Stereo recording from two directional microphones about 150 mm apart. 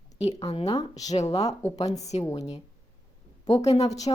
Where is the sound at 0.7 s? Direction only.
25° left (ahead or behind).